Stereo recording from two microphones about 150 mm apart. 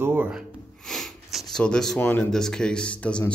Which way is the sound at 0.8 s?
5° left (ahead or behind).